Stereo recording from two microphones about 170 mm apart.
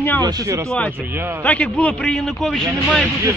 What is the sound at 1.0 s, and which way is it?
Speech, 10° right (ahead or behind).